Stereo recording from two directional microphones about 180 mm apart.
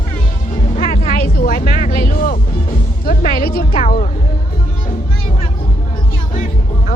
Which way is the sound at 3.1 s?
55° left (ahead or behind).